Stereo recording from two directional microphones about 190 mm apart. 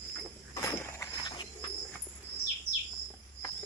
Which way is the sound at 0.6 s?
15° left (ahead or behind).